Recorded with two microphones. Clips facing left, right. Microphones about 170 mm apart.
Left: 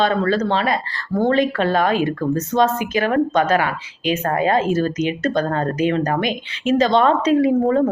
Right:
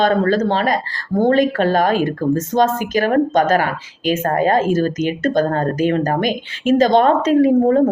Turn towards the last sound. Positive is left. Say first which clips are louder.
# right 3 dB
turn(degrees=-45)  # may be behind; listen again after turning